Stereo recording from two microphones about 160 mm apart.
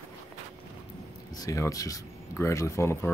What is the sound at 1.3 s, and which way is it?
Speech, 20° left (ahead or behind).